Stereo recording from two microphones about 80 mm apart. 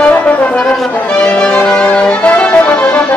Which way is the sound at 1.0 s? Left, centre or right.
Centre.